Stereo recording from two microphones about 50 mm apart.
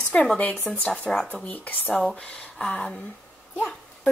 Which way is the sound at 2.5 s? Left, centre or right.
Centre.